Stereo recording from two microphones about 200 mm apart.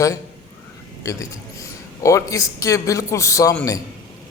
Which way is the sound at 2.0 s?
15° left (ahead or behind).